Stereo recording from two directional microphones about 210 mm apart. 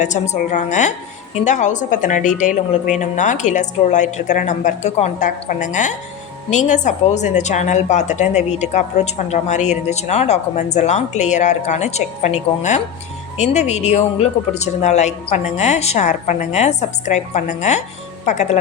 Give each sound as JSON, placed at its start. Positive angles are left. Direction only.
{"t": 0.0, "sound": "a woman's voice", "side_deg": 35}